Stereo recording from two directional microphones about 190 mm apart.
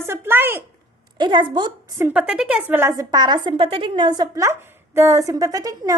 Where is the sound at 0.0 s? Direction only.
15° right (ahead or behind).